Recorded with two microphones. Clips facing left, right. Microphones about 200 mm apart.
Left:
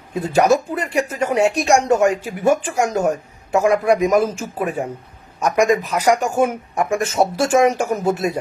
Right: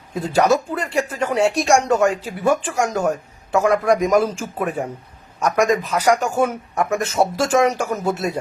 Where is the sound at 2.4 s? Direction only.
45° left (ahead or behind).